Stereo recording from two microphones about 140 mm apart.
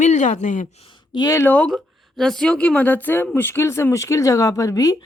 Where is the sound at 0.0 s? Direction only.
60° left (ahead or behind).